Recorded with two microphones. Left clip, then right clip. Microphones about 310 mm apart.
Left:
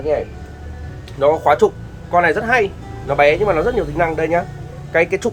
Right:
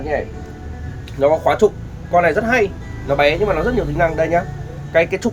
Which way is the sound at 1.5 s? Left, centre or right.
Centre.